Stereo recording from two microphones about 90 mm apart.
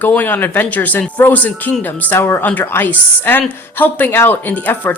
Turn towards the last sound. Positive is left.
turn(degrees=20)  # may be behind; listen again after turning